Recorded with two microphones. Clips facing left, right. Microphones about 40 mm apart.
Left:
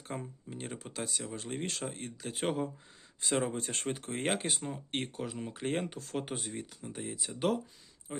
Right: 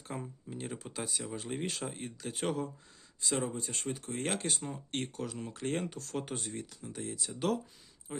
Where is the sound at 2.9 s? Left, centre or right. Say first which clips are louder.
Left 2 dB; left.